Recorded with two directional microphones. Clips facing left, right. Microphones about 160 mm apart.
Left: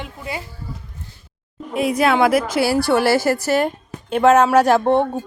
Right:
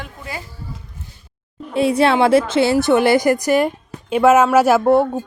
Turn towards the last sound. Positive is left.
turn(degrees=-5)  # may be behind; listen again after turning